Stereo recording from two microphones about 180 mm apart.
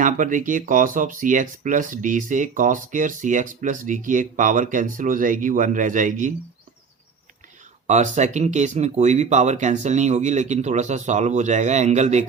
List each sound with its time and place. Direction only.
0.0 s speech: 45° right (ahead or behind)
7.9 s speech: 40° right (ahead or behind)